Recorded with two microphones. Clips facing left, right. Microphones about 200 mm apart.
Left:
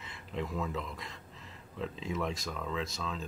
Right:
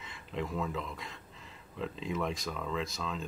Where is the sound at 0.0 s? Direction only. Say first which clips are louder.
Even; centre (ahead or behind).